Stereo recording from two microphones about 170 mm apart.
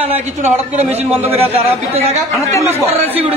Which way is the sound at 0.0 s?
40° right (ahead or behind).